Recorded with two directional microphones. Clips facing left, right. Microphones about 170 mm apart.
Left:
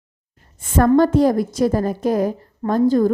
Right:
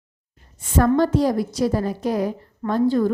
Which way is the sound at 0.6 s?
50° left (ahead or behind).